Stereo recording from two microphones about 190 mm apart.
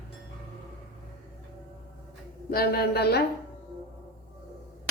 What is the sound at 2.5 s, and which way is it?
Speech, 55° left (ahead or behind).